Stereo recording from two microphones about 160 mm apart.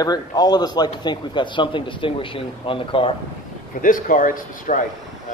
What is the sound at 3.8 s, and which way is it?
Speech, 55° left (ahead or behind).